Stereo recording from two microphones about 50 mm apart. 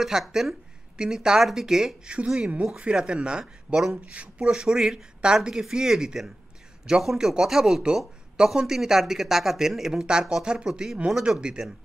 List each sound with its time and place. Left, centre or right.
0.0 s speech: centre; by 4.6 s right
4.6 s speech: centre